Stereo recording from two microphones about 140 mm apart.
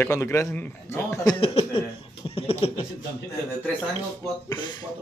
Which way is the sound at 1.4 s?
40° left (ahead or behind).